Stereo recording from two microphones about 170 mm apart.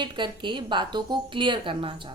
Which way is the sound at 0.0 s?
25° right (ahead or behind).